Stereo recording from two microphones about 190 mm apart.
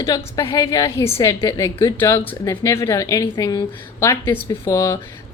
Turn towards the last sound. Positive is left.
turn(degrees=20)  # may be behind; listen again after turning